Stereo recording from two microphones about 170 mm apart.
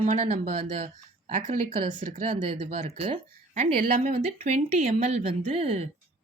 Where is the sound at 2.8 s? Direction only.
35° right (ahead or behind).